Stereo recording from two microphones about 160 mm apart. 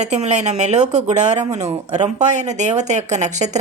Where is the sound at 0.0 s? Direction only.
45° right (ahead or behind).